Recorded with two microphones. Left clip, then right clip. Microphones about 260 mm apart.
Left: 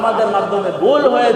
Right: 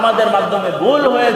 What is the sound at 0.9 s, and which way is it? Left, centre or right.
Speech, right.